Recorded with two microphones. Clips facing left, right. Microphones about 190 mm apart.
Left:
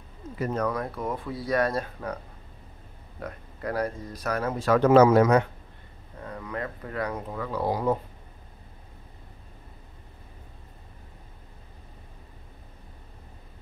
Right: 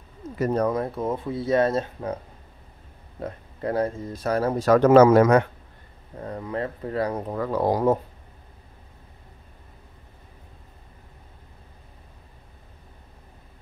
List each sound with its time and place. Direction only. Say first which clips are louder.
0.4 s speech: right 5 dB; 35° right (ahead or behind)
3.2 s speech: right 4 dB; 25° right (ahead or behind); by 5.4 s 50° right (ahead or behind)
6.1 s speech: right 5 dB; 30° right (ahead or behind)